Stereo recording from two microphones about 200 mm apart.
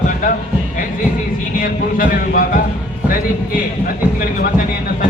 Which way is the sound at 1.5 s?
45° left (ahead or behind).